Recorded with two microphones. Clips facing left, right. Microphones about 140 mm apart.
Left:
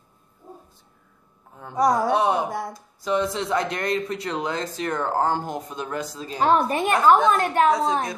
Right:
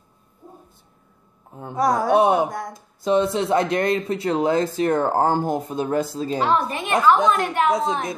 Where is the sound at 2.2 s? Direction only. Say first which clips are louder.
Right 5 dB; 20° right (ahead or behind).